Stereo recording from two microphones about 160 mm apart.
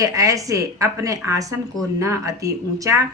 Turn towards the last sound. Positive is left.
turn(degrees=-20)  # may be behind; listen again after turning